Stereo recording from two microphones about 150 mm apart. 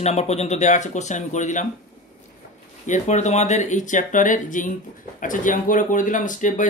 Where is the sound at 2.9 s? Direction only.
50° left (ahead or behind).